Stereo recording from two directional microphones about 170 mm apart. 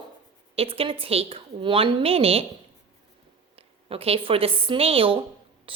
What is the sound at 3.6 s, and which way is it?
A woman's voice, 35° right (ahead or behind).